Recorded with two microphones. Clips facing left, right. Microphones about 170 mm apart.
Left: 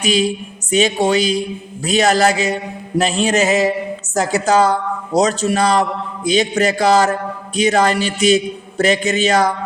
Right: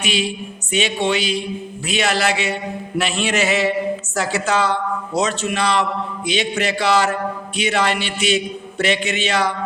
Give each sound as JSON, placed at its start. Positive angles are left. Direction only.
{"t": 0.0, "sound": "speech", "side_deg": 40}